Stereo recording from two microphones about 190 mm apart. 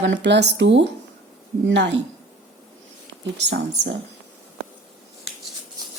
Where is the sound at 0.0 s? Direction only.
70° right (ahead or behind).